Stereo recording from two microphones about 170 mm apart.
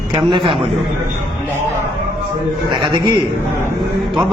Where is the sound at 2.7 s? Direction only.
30° right (ahead or behind).